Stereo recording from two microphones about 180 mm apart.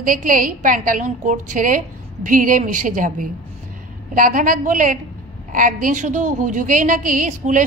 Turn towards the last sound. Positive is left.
turn(degrees=-45)  # may be behind; listen again after turning